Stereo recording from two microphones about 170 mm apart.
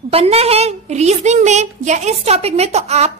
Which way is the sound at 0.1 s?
35° right (ahead or behind).